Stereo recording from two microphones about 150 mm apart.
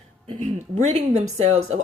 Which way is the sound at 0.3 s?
50° right (ahead or behind).